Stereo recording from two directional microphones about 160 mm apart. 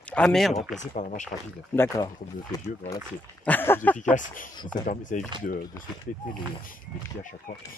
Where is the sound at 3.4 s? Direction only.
15° left (ahead or behind).